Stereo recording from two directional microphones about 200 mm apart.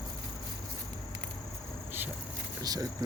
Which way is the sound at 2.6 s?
20° right (ahead or behind).